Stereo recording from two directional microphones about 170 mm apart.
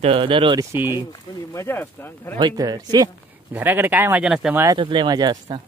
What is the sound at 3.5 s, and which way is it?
Speech, 10° right (ahead or behind).